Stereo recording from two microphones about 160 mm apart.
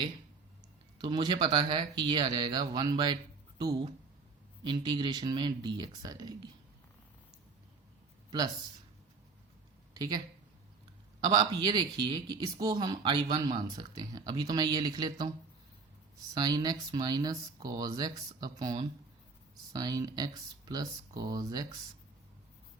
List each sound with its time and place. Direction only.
1.0 s speech: 25° right (ahead or behind)
11.2 s speech: 25° right (ahead or behind)
16.3 s speech: 25° right (ahead or behind)